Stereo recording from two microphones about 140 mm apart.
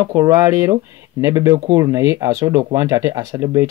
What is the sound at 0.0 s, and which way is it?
Speech, 20° right (ahead or behind).